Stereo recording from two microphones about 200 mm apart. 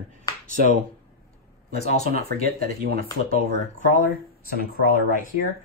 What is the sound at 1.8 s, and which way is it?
Speech, 35° left (ahead or behind).